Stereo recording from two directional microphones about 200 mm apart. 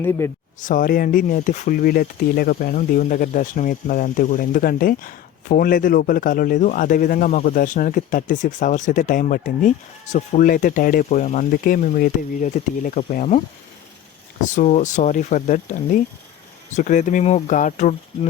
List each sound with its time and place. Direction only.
0.0 s speech: 15° left (ahead or behind)
0.6 s speech: 45° left (ahead or behind)
14.5 s speech: 40° left (ahead or behind)